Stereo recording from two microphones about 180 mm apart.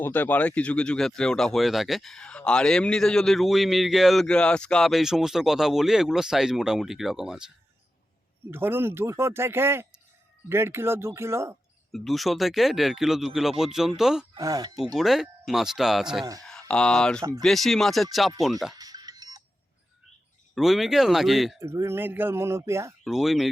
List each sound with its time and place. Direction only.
0.0 s speech: 10° left (ahead or behind); by 11.5 s 15° right (ahead or behind)
11.9 s speech: centre (ahead or behind)
14.3 s speech: 20° right (ahead or behind)
14.9 s speech: centre (ahead or behind)
18.7 s music: 20° right (ahead or behind)
20.6 s speech: centre (ahead or behind)
21.6 s speech: 15° right (ahead or behind)
23.0 s speech: centre (ahead or behind)